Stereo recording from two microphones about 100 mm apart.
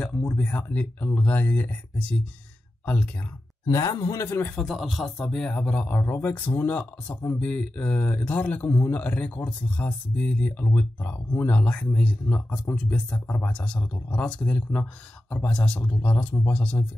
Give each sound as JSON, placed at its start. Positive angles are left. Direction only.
{"t": 0.0, "sound": "speech", "side_deg": 10}
{"t": 3.6, "sound": "a man's voice", "side_deg": 35}
{"t": 4.6, "sound": "speech", "side_deg": 0}